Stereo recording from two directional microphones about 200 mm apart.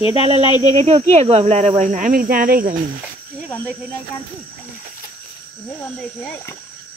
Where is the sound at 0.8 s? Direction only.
30° right (ahead or behind).